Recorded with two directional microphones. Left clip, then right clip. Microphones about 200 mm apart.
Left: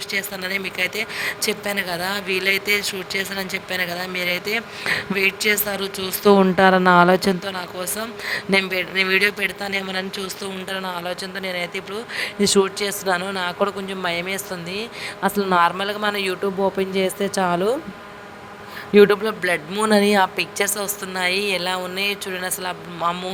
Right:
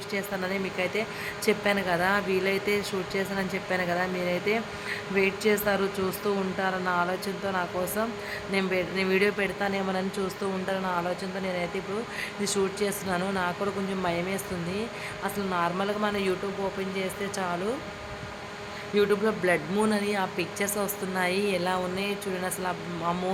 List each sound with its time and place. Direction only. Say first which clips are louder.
0.1 s speech: left 5 dB; 55° left (ahead or behind)
1.6 s a woman's voice: left 1 dB; centre (ahead or behind)
2.1 s a man's voice: left 5 dB; 55° left (ahead or behind)
5.6 s a woman's voice: left 1 dB; centre (ahead or behind)
6.1 s speech: left 13 dB; 55° left (ahead or behind)
8.3 s a man's voice: left 8 dB; 55° left (ahead or behind)
10.7 s speech: left 3 dB; 60° left (ahead or behind)
12.1 s a man's voice: left 14 dB; 45° left (ahead or behind)
18.9 s a man's voice: left 10 dB; 50° left (ahead or behind)